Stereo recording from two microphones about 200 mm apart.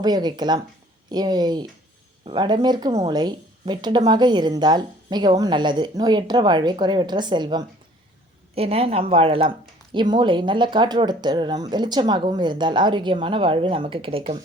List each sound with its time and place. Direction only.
0.0 s speech: 20° right (ahead or behind)